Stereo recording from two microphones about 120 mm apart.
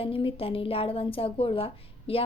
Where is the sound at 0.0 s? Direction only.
50° left (ahead or behind).